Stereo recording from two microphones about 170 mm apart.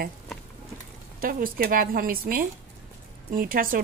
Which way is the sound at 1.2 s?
55° right (ahead or behind).